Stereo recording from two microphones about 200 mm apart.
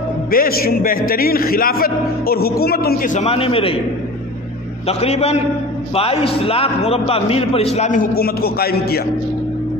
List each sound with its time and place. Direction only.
0.3 s a man's voice: 45° left (ahead or behind); by 3.8 s 30° left (ahead or behind)
4.8 s a man's voice: 30° left (ahead or behind)
8.2 s a man's voice: 50° left (ahead or behind)